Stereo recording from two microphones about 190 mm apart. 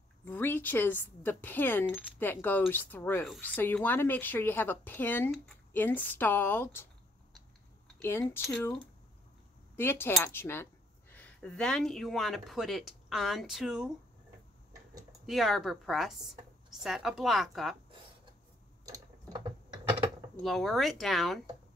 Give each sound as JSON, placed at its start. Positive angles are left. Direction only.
{"t": 0.2, "sound": "speech", "side_deg": 10}
{"t": 8.0, "sound": "speech", "side_deg": 10}
{"t": 9.8, "sound": "speech", "side_deg": 10}
{"t": 15.2, "sound": "speech", "side_deg": 0}
{"t": 18.9, "sound": "a sound", "side_deg": -20}
{"t": 20.4, "sound": "speech", "side_deg": 0}